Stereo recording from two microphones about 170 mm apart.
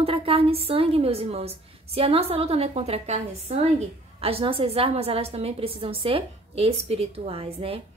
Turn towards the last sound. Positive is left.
turn(degrees=-35)  # may be behind; listen again after turning